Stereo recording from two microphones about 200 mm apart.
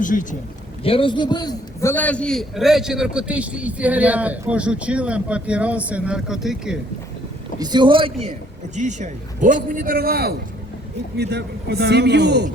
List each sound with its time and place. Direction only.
0.0 s a man's voice: 40° left (ahead or behind)
0.9 s a man's voice: 25° left (ahead or behind); by 6.7 s centre (ahead or behind)
7.6 s a man's voice: 20° right (ahead or behind); by 12.5 s 55° right (ahead or behind)